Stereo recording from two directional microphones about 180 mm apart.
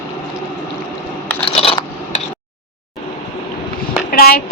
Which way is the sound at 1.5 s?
30° left (ahead or behind).